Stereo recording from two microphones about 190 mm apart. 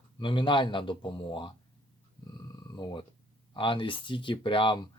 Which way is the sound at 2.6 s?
20° left (ahead or behind).